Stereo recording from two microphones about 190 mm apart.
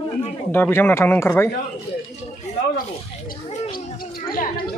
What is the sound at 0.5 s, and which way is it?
Speech, 10° left (ahead or behind).